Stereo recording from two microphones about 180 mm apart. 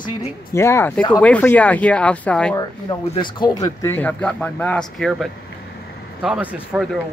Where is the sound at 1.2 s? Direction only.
10° left (ahead or behind).